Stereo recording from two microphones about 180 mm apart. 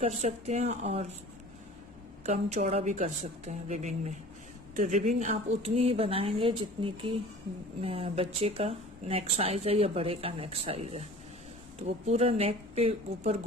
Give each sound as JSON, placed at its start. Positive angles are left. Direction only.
{"t": 0.0, "sound": "speech", "side_deg": -40}
{"t": 2.2, "sound": "speech", "side_deg": -40}